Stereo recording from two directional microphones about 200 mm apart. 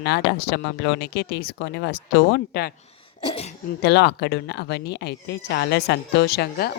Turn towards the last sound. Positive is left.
turn(degrees=55)  # may be behind; listen again after turning